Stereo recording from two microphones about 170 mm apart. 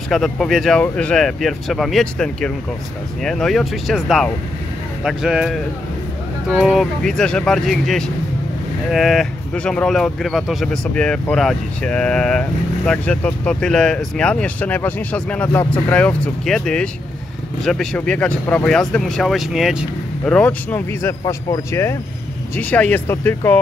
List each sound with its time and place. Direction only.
0.1 s speech: centre (ahead or behind)
20.2 s speech: 5° left (ahead or behind)